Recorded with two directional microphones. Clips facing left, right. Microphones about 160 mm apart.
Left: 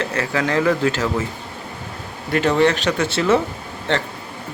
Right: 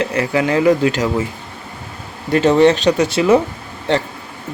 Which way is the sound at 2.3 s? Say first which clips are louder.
Right 5 dB; 20° right (ahead or behind).